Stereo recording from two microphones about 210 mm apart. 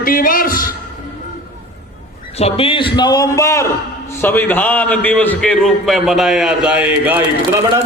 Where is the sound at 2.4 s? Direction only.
25° left (ahead or behind); by 7.6 s 10° right (ahead or behind).